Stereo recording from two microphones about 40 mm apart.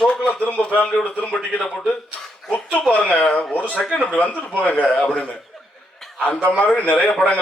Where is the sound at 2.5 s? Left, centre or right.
Left.